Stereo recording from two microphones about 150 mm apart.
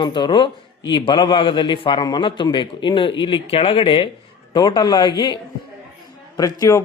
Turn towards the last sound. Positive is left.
turn(degrees=25)  # may be behind; listen again after turning